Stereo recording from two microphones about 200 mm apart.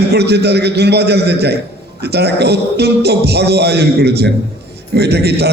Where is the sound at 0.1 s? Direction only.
55° right (ahead or behind).